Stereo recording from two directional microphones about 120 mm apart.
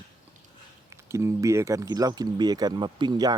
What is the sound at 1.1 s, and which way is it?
Speech, 25° right (ahead or behind).